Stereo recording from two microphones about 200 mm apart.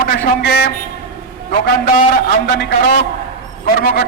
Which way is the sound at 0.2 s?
50° left (ahead or behind).